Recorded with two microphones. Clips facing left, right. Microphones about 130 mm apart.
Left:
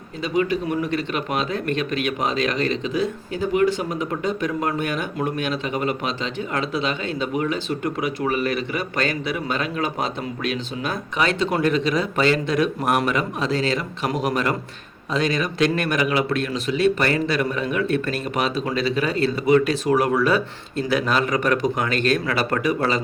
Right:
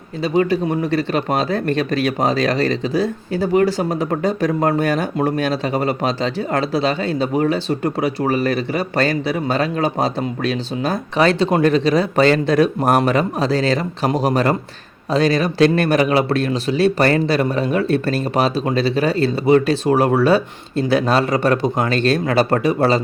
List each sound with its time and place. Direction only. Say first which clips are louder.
0.2 s speech: right 5 dB; 35° right (ahead or behind)